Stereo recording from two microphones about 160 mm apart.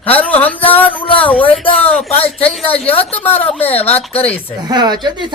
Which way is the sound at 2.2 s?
40° left (ahead or behind).